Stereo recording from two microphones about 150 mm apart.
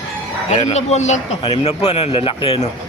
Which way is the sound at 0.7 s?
45° left (ahead or behind).